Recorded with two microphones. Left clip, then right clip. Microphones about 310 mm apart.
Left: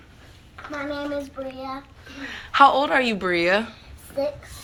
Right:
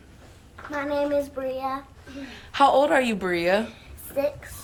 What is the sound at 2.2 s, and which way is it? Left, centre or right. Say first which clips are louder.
Speech: left 4 dB; centre.